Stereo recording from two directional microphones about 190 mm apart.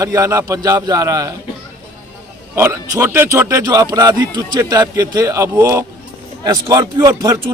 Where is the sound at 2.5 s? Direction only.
15° right (ahead or behind).